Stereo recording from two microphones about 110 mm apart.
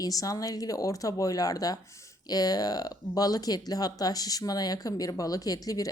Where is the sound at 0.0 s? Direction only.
35° left (ahead or behind).